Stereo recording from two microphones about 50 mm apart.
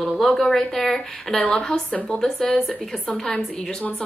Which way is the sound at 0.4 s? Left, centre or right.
Centre.